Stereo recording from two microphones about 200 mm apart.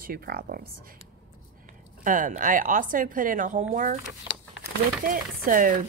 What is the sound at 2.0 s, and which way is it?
Speech, 40° right (ahead or behind).